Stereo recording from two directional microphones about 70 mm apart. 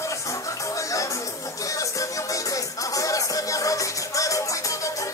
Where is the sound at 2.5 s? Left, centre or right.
Left.